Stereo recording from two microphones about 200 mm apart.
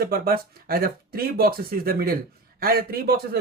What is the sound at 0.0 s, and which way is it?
Speech, 50° right (ahead or behind).